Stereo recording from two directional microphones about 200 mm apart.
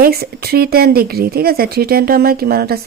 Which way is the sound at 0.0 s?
50° right (ahead or behind).